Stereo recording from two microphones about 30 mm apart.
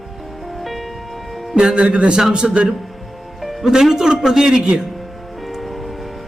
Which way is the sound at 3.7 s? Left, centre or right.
Centre.